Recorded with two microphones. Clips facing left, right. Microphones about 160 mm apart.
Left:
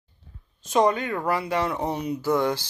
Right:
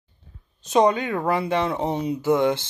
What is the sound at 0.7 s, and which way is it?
Speech, 20° right (ahead or behind).